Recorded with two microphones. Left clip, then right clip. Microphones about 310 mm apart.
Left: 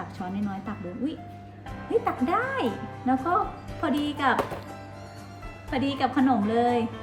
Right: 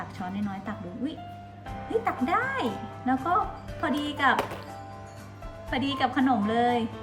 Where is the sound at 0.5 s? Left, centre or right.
Right.